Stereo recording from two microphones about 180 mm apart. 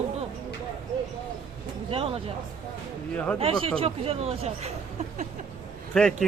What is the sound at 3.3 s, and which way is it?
Speech, 35° right (ahead or behind).